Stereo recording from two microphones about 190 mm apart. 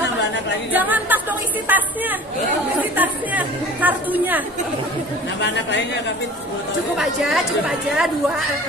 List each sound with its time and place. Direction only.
0.7 s a woman's voice: 10° right (ahead or behind)
5.4 s speech: 65° left (ahead or behind)
7.0 s a woman's voice: centre (ahead or behind)